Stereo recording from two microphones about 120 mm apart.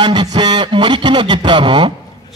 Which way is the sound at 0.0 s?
35° right (ahead or behind).